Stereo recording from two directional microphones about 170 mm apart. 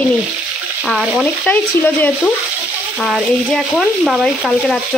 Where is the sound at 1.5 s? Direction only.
10° left (ahead or behind).